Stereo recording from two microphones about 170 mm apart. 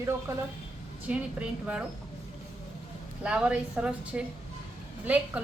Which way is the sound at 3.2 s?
5° right (ahead or behind).